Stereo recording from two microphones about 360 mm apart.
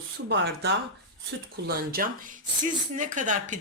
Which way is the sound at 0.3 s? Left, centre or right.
Right.